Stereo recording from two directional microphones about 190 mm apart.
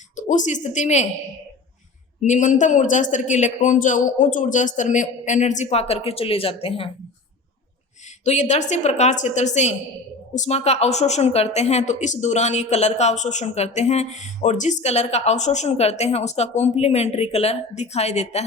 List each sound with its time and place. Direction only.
0.2 s a woman's voice: 40° left (ahead or behind)
2.2 s a woman's voice: 40° left (ahead or behind)
8.2 s a woman's voice: 40° left (ahead or behind)